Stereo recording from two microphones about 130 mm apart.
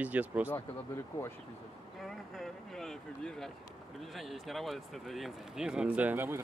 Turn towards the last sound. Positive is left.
turn(degrees=-15)  # may be behind; listen again after turning